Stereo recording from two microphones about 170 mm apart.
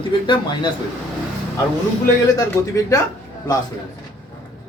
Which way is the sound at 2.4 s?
20° left (ahead or behind).